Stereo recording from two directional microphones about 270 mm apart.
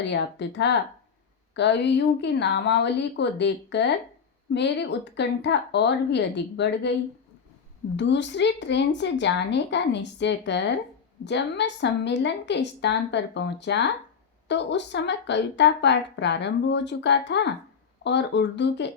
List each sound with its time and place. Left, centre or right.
0.1 s a woman's voice: left
7.9 s a woman's voice: left